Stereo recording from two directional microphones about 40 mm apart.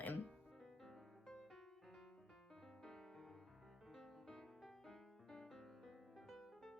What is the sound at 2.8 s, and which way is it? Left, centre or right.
Music, centre.